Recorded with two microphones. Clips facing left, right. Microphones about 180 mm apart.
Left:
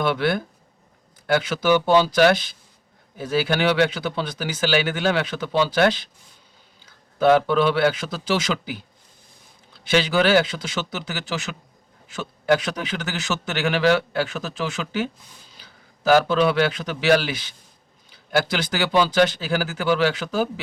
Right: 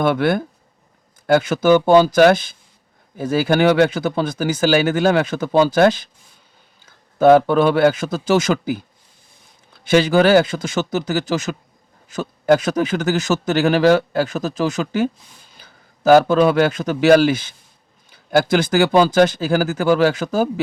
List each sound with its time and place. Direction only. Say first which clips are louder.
0.0 s speech: right 5 dB; 50° right (ahead or behind)
9.8 s a man's voice: right 6 dB; 45° right (ahead or behind)